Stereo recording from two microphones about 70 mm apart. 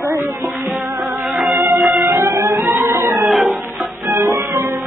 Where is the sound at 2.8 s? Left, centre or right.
Right.